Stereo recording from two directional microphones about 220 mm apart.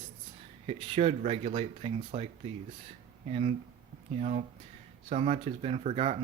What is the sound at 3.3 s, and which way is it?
Speech, 30° right (ahead or behind).